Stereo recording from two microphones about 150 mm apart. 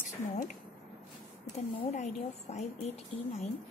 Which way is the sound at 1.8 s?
45° left (ahead or behind).